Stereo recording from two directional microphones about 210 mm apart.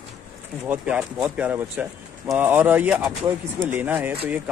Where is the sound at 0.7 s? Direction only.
5° right (ahead or behind).